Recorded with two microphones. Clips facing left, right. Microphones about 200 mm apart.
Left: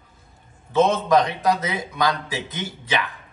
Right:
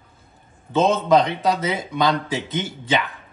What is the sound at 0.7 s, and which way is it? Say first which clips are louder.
Speech: right 1 dB; 25° right (ahead or behind).